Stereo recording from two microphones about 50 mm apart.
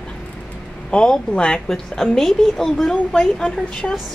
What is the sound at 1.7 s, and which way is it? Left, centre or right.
A woman's voice, centre.